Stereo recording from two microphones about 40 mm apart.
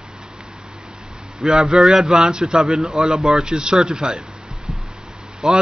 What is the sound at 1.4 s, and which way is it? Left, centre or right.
Speech, centre.